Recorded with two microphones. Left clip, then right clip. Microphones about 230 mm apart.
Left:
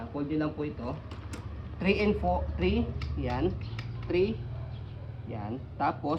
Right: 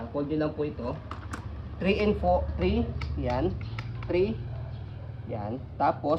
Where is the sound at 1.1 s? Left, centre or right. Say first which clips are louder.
Right 5 dB; centre.